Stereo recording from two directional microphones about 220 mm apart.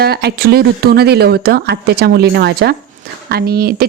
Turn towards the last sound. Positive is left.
turn(degrees=-45)  # may be behind; listen again after turning